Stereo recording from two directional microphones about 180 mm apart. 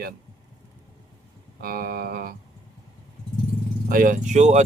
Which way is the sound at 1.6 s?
55° right (ahead or behind).